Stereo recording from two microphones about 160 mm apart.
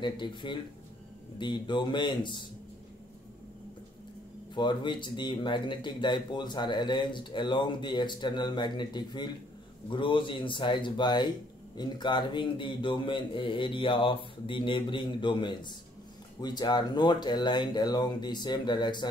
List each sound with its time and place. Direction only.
0.0 s speech: 30° left (ahead or behind)
4.6 s a man's voice: 30° left (ahead or behind)